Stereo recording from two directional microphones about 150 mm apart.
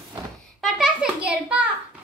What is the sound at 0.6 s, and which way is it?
A child's voice, 5° right (ahead or behind).